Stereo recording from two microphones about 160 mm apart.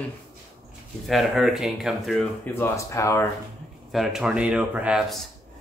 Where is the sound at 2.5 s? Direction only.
15° left (ahead or behind).